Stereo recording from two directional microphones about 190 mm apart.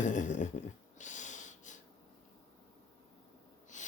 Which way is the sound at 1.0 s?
40° left (ahead or behind).